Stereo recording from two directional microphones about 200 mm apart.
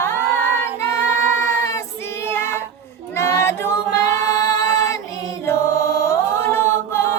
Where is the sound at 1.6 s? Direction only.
15° left (ahead or behind).